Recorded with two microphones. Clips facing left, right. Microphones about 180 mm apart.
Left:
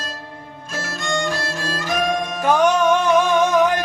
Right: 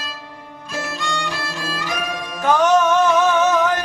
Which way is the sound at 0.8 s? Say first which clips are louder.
Left 5 dB; 45° left (ahead or behind).